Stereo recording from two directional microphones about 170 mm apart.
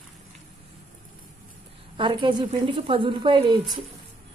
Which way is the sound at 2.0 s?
30° right (ahead or behind).